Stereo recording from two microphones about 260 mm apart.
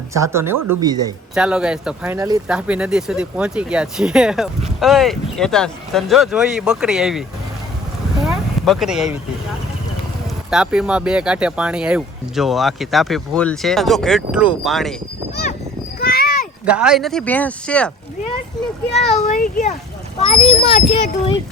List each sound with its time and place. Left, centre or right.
0.1 s speech: centre
1.4 s speech: centre
8.2 s a sound: centre
10.5 s speech: centre
16.0 s a sound: left
16.6 s speech: centre
18.9 s a child's voice: left